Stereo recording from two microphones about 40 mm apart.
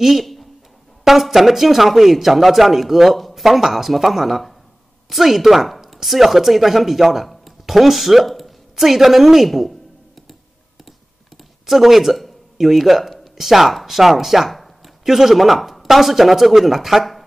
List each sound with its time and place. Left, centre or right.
0.0 s a sound: centre
1.0 s speech: centre
11.6 s speech: centre